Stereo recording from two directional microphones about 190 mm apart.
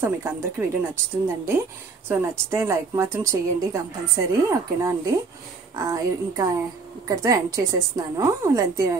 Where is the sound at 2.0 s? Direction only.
15° right (ahead or behind).